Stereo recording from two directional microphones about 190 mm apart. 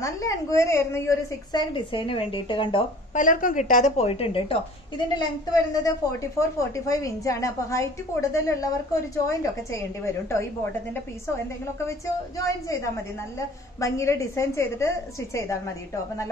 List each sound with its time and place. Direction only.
0.0 s a woman's voice: 15° left (ahead or behind)
3.2 s a woman's voice: 45° left (ahead or behind); by 10.7 s 15° left (ahead or behind)
12.4 s a woman's voice: 15° left (ahead or behind)